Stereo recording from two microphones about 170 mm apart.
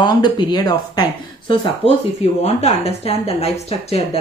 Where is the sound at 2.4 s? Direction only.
40° left (ahead or behind).